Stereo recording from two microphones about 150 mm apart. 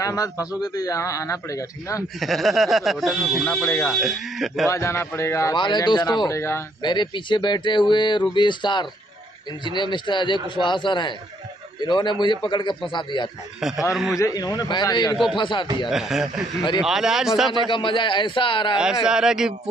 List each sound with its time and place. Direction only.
0.0 s a man's voice: 25° left (ahead or behind)
2.1 s speech: centre (ahead or behind)
3.6 s speech: 15° left (ahead or behind)
4.0 s speech: centre (ahead or behind)
4.6 s a man's voice: 20° left (ahead or behind)
5.6 s a man's voice: 30° left (ahead or behind)
6.8 s a man's voice: 30° left (ahead or behind)
13.6 s speech: 5° right (ahead or behind)
14.1 s a man's voice: 25° left (ahead or behind)
15.9 s speech: 5° right (ahead or behind)
17.6 s a man's voice: 35° left (ahead or behind)
19.0 s speech: 5° right (ahead or behind)